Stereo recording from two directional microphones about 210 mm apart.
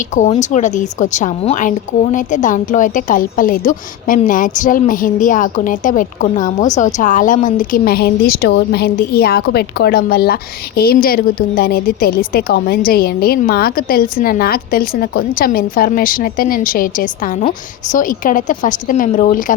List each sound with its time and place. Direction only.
0.1 s a woman's voice: 35° left (ahead or behind)